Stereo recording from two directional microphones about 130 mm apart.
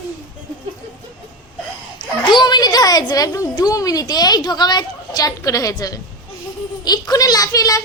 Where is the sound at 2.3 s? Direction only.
35° left (ahead or behind).